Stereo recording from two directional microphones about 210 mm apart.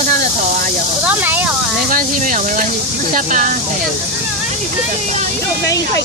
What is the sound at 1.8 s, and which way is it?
Speech, 40° right (ahead or behind).